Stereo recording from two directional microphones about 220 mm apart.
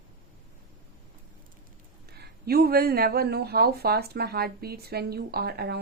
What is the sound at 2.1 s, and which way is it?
A woman's voice, 45° right (ahead or behind).